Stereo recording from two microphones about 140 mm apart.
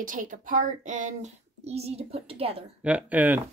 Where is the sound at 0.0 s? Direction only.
70° right (ahead or behind); by 2.6 s 45° right (ahead or behind).